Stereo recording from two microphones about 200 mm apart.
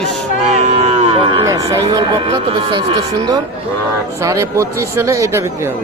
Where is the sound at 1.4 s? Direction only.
15° right (ahead or behind).